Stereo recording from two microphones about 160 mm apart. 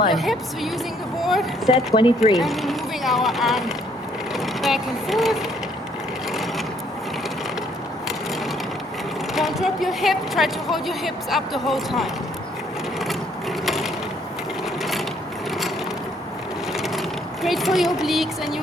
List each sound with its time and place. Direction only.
0.1 s a woman's voice: centre (ahead or behind)
1.7 s speech: 35° left (ahead or behind)
2.3 s speech: centre (ahead or behind)
9.3 s a woman's voice: centre (ahead or behind)
13.7 s mechanisms: centre (ahead or behind)
16.7 s a sound: centre (ahead or behind)
17.4 s a woman's voice: centre (ahead or behind)